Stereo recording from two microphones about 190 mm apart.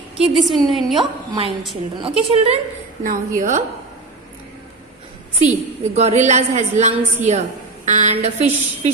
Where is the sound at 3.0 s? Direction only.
45° right (ahead or behind).